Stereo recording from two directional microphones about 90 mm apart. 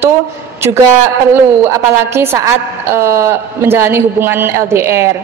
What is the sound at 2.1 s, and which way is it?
A woman's voice, 25° right (ahead or behind).